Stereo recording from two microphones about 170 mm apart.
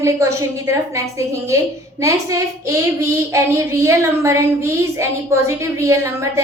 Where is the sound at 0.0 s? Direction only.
15° right (ahead or behind).